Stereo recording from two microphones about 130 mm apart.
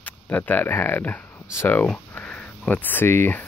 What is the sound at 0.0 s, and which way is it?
Speech, 15° left (ahead or behind).